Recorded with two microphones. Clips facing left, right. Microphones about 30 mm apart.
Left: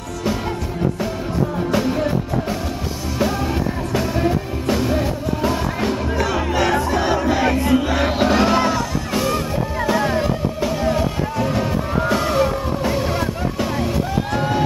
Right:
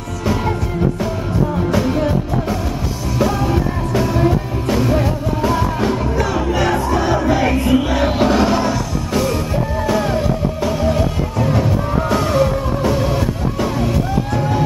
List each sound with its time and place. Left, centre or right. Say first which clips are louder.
3.2 s music: right 4 dB; centre
7.0 s crowd: right 2 dB; centre
7.9 s music: right 2 dB; centre